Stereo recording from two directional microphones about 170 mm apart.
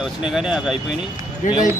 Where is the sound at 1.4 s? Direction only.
50° left (ahead or behind).